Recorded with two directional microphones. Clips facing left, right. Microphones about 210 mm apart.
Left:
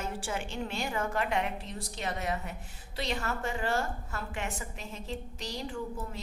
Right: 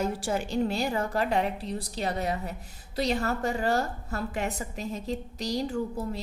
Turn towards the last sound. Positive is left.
turn(degrees=-40)  # may be behind; listen again after turning